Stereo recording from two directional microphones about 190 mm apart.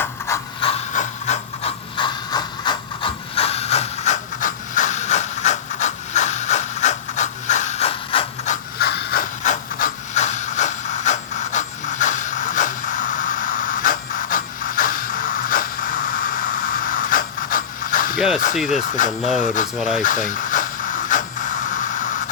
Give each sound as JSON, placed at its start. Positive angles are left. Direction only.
{"t": 0.3, "sound": "ratchet", "side_deg": 15}
{"t": 0.6, "sound": "ratchet", "side_deg": 35}
{"t": 2.0, "sound": "ratchet", "side_deg": 25}
{"t": 8.8, "sound": "a sound", "side_deg": 55}
{"t": 9.4, "sound": "wood", "side_deg": 45}
{"t": 18.5, "sound": "speech", "side_deg": 0}
{"t": 18.8, "sound": "speech", "side_deg": 45}
{"t": 19.7, "sound": "speech", "side_deg": 0}
{"t": 20.0, "sound": "a sound", "side_deg": 45}